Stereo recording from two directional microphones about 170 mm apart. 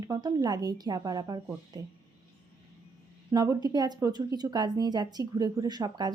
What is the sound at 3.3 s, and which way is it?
Speech, 25° right (ahead or behind).